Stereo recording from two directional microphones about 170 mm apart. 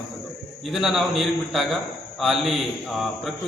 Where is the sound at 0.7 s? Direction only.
Centre (ahead or behind).